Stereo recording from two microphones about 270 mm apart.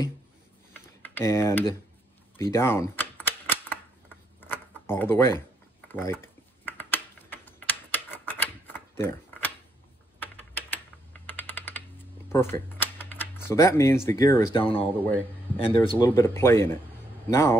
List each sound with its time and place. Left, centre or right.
1.0 s mechanisms: centre
2.5 s typewriter: centre
4.4 s a sound: centre
10.2 s typing: centre
11.3 s computer keyboard: centre
12.3 s a man's voice: centre